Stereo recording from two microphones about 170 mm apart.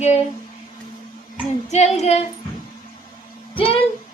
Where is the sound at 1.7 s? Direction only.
40° left (ahead or behind).